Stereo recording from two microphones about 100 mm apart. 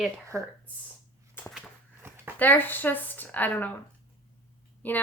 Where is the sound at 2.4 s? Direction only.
20° left (ahead or behind).